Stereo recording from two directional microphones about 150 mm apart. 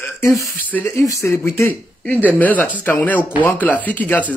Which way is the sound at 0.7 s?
15° left (ahead or behind).